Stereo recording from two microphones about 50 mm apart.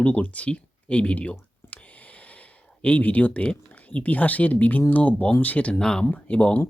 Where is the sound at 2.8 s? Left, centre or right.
Left.